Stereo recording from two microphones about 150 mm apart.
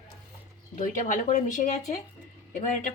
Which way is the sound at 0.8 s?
60° left (ahead or behind).